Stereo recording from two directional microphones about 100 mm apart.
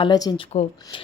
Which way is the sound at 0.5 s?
90° left.